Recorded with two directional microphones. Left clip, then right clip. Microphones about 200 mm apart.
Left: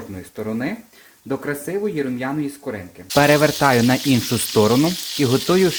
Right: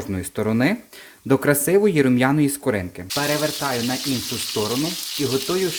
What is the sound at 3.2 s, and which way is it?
Speech, 40° left (ahead or behind).